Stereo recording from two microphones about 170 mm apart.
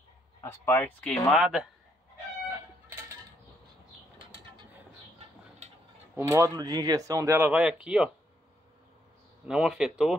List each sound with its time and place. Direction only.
0.4 s speech: 15° left (ahead or behind); by 1.7 s 5° right (ahead or behind)
6.1 s speech: 15° right (ahead or behind)
9.5 s speech: 5° right (ahead or behind)